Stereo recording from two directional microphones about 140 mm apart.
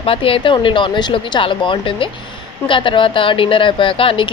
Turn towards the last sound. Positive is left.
turn(degrees=40)  # may be behind; listen again after turning